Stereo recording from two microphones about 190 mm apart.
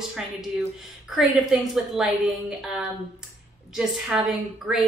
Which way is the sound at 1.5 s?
Centre (ahead or behind).